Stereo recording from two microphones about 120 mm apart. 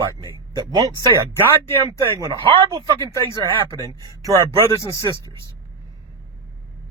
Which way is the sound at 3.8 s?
35° right (ahead or behind).